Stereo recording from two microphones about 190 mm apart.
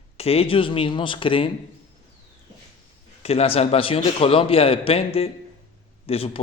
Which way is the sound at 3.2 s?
30° left (ahead or behind).